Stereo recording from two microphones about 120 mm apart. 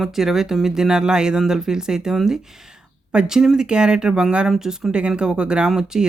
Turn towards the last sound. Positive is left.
turn(degrees=-5)  # may be behind; listen again after turning